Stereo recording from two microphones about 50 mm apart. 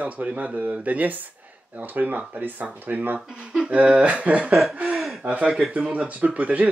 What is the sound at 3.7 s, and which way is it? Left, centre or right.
Speech, right.